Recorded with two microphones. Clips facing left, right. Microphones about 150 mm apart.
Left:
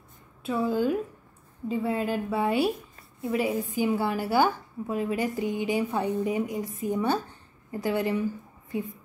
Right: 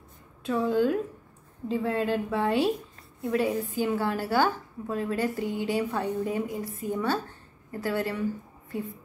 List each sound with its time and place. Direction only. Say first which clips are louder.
0.4 s a woman's voice: right 1 dB; 5° left (ahead or behind)